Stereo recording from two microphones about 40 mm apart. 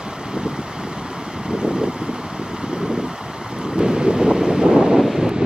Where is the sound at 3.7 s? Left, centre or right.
Centre.